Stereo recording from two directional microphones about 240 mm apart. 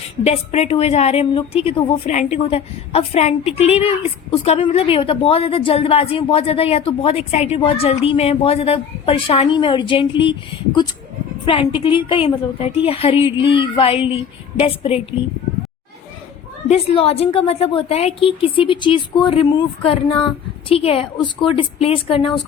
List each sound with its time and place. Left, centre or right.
0.3 s a woman's voice: left
11.4 s a woman's voice: left
16.6 s a woman's voice: left